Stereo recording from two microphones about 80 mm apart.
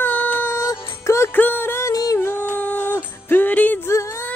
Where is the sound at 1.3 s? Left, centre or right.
Left.